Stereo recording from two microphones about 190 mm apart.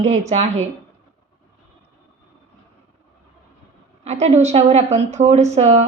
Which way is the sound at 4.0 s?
35° right (ahead or behind).